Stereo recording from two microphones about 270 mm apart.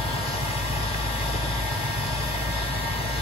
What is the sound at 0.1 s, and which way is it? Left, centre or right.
Vehicle, left.